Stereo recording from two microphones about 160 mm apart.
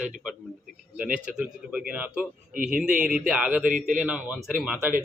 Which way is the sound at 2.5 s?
60° right (ahead or behind).